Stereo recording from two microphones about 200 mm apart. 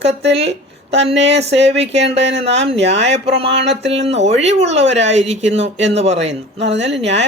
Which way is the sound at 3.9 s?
30° right (ahead or behind).